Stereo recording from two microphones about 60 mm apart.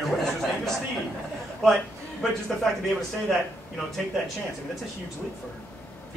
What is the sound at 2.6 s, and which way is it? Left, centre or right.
Speech, centre.